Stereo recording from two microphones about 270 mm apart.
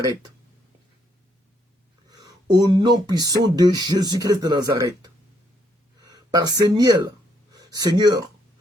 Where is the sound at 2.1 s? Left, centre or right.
Centre.